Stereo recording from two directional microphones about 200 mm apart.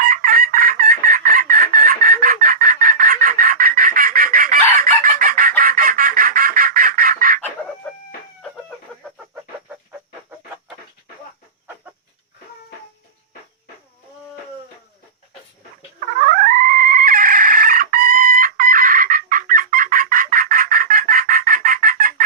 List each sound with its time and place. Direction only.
0.0 s chicken: 45° right (ahead or behind)
16.2 s cat: 45° right (ahead or behind)